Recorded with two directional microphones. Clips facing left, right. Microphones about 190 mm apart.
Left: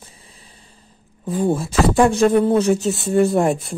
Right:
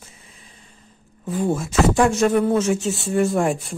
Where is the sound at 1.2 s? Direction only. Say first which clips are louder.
Left 3 dB; 30° left (ahead or behind).